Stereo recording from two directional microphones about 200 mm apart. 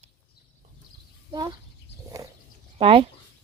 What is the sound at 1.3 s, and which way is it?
Speech, 20° right (ahead or behind).